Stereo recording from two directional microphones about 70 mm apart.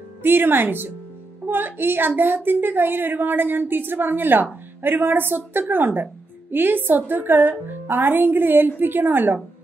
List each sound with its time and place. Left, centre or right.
0.2 s a woman's voice: right